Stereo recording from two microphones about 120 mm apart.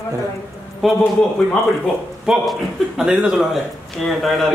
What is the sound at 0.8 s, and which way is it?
Speech, centre (ahead or behind).